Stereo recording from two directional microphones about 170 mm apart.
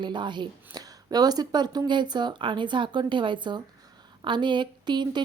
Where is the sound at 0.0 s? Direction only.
25° right (ahead or behind).